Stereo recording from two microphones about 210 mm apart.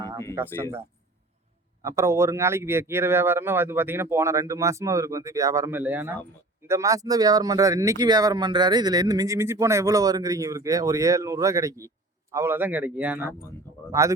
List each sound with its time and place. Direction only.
0.0 s a sound: 15° right (ahead or behind)
0.3 s speech: 10° right (ahead or behind)
1.8 s speech: 15° right (ahead or behind)